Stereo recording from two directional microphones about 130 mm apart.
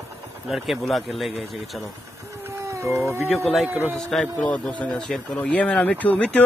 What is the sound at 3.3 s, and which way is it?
Speech, centre (ahead or behind).